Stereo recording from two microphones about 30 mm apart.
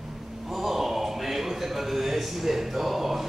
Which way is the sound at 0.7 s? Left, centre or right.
Centre.